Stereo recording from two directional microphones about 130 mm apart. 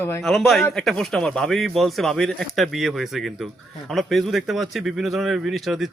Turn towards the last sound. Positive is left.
turn(degrees=0)  # may be behind; listen again after turning